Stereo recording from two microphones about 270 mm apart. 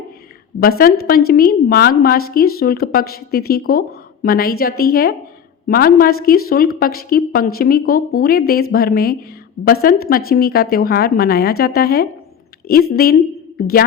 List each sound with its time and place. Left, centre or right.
1.0 s a woman's voice: left